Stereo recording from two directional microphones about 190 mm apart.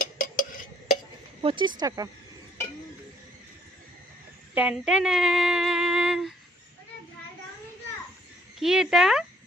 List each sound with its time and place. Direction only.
0.0 s a sound: 45° left (ahead or behind)
1.4 s speech: 25° right (ahead or behind)
4.6 s speech: 5° right (ahead or behind)
8.5 s speech: centre (ahead or behind)